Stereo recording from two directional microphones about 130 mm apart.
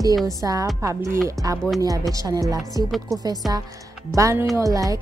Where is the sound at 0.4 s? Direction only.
25° right (ahead or behind).